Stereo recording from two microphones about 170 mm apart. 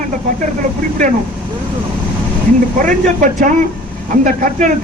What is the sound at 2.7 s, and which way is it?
A man's voice, 50° right (ahead or behind).